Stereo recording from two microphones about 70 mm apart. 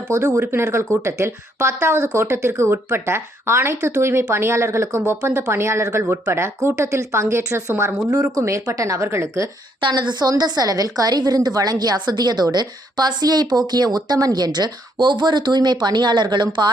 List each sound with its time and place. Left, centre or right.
0.1 s speech: right
9.0 s speech: right
9.9 s a woman's voice: right